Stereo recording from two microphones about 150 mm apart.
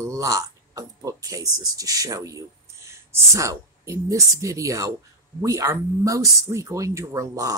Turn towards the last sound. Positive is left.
turn(degrees=-20)  # may be behind; listen again after turning